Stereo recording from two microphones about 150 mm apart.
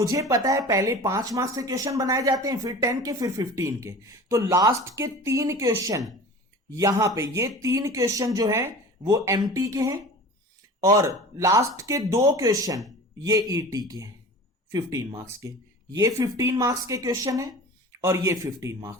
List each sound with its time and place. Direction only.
0.0 s speech: 25° right (ahead or behind)